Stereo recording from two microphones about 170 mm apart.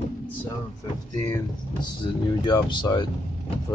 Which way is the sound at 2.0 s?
30° left (ahead or behind).